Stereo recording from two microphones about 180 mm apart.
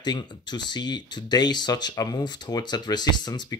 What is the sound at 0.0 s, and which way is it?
Speech, 25° left (ahead or behind).